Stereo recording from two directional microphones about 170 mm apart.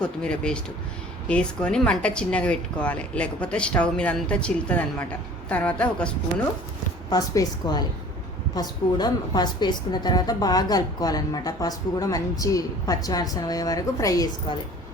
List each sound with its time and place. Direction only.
0.0 s speech: 5° left (ahead or behind)
7.1 s a woman's voice: 25° left (ahead or behind)